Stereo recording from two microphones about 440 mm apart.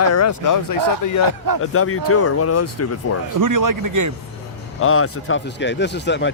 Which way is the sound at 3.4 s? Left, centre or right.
Right.